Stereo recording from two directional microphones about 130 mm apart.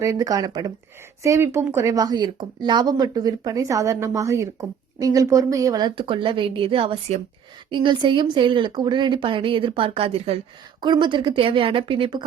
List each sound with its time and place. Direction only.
0.0 s speech: 25° right (ahead or behind); by 10.3 s 50° right (ahead or behind)
10.8 s speech: 35° right (ahead or behind)